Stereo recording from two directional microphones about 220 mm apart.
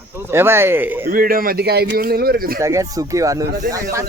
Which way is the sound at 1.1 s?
40° right (ahead or behind).